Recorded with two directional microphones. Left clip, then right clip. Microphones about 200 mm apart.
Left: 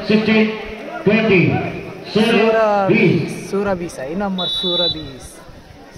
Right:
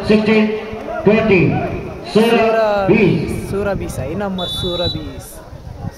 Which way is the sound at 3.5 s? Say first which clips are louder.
Left 1 dB; 20° right (ahead or behind).